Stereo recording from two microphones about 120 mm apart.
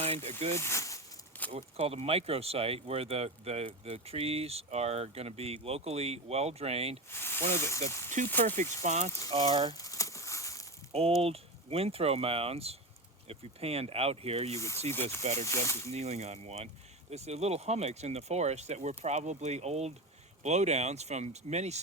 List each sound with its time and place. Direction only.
0.0 s speech: 55° right (ahead or behind)
0.5 s speech: 25° left (ahead or behind)
1.5 s speech: 55° right (ahead or behind)
7.1 s speech: 20° left (ahead or behind)
8.8 s speech: 80° right
9.5 s speech: 40° right (ahead or behind)
9.7 s crumpling: 30° left (ahead or behind)
10.9 s speech: 55° right (ahead or behind)
14.5 s speech: 25° left (ahead or behind)
15.2 s speech: 70° right (ahead or behind)
15.4 s speech: 25° left (ahead or behind)
15.9 s speech: 65° right (ahead or behind)